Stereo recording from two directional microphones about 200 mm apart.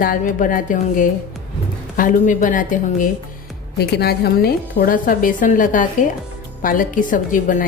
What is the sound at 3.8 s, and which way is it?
A woman's voice, 55° left (ahead or behind).